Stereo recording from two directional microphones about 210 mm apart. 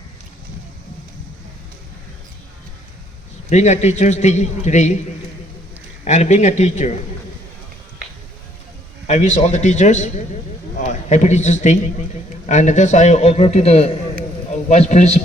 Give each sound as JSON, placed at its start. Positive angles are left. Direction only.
{"t": 3.5, "sound": "a man's voice", "side_deg": 35}
{"t": 6.1, "sound": "a man's voice", "side_deg": 35}
{"t": 9.0, "sound": "a man's voice", "side_deg": 35}